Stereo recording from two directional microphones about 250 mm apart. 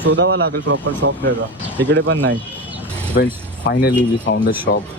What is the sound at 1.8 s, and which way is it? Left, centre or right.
Speech, right.